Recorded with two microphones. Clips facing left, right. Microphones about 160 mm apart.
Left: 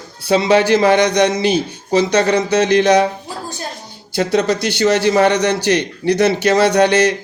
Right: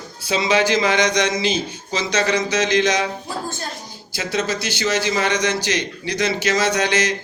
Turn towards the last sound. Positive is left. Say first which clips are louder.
# left 8 dB
turn(degrees=60)  # may be behind; listen again after turning